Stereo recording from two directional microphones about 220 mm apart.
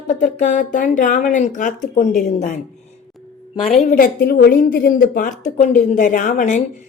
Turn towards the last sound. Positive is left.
turn(degrees=35)  # may be behind; listen again after turning